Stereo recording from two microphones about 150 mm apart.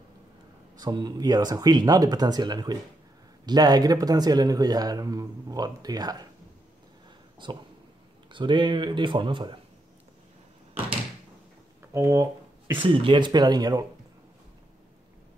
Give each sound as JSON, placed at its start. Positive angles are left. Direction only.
{"t": 0.7, "sound": "speech", "side_deg": -25}
{"t": 7.4, "sound": "speech", "side_deg": -30}
{"t": 11.9, "sound": "a sound", "side_deg": -20}
{"t": 12.7, "sound": "speech", "side_deg": -35}